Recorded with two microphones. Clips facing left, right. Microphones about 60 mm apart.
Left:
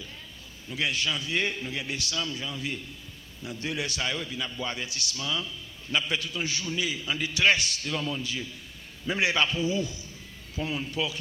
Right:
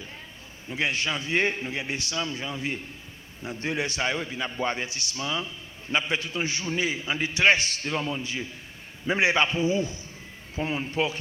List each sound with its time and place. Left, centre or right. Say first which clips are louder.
0.7 s a man's voice: right 2 dB; right